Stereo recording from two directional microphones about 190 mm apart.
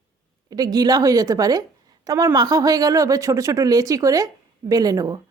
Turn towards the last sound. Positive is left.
turn(degrees=-20)  # may be behind; listen again after turning